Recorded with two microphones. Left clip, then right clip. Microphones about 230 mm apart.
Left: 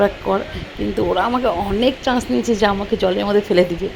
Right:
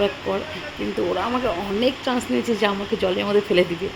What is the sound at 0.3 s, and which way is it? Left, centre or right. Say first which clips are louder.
Speech: left 5 dB; centre.